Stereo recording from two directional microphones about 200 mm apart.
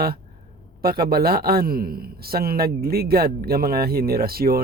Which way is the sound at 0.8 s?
50° right (ahead or behind).